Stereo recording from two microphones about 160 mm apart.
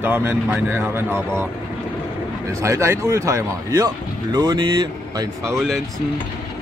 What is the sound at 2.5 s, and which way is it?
Speech, 20° right (ahead or behind).